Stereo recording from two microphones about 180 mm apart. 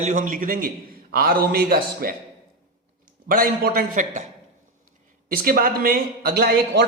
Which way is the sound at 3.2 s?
50° right (ahead or behind).